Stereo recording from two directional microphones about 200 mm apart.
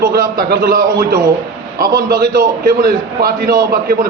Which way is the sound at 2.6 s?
45° right (ahead or behind).